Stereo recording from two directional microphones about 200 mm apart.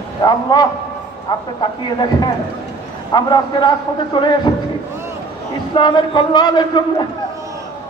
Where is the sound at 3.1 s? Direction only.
20° left (ahead or behind).